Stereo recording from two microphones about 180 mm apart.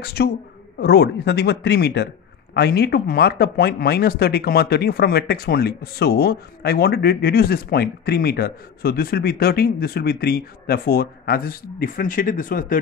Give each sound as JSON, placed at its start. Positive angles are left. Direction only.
{"t": 0.0, "sound": "speech", "side_deg": 65}